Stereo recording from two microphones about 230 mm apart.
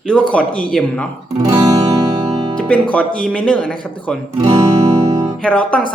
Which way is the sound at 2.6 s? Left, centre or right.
Centre.